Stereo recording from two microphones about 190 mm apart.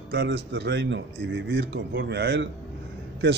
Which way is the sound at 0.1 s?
65° right (ahead or behind).